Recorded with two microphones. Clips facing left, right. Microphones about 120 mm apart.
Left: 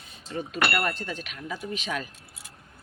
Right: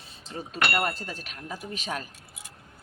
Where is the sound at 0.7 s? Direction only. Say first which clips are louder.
Even; 30° right (ahead or behind).